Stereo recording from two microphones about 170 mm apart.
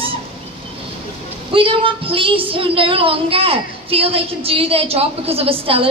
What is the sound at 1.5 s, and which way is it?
Speech, 30° right (ahead or behind).